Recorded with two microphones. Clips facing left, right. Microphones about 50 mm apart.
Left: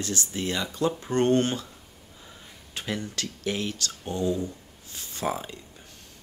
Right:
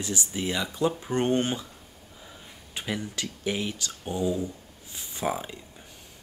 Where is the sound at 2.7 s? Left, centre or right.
Centre.